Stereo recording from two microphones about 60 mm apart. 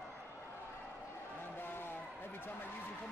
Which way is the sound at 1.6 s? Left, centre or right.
Left.